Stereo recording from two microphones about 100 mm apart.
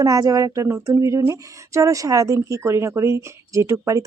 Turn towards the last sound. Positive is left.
turn(degrees=-30)  # may be behind; listen again after turning